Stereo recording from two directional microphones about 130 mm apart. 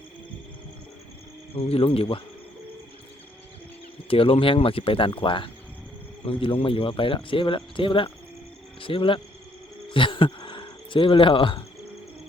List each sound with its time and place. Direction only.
1.5 s speech: 45° left (ahead or behind)
4.1 s speech: 45° left (ahead or behind)
9.9 s a sound: 40° left (ahead or behind)